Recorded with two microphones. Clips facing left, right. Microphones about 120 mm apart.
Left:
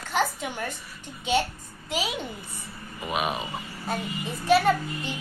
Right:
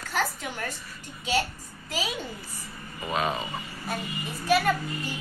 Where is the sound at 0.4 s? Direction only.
10° left (ahead or behind).